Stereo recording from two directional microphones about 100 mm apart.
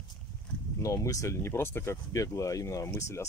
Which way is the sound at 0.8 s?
35° left (ahead or behind).